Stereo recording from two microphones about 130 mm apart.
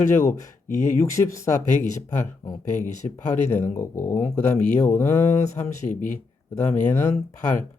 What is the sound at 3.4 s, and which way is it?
Speech, 15° left (ahead or behind).